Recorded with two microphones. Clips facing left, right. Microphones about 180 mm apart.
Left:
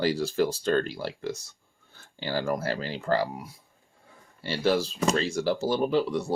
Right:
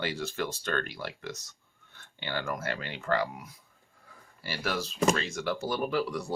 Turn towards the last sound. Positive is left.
turn(degrees=25)  # may be behind; listen again after turning